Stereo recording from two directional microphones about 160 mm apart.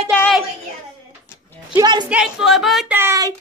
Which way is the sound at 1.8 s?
25° right (ahead or behind).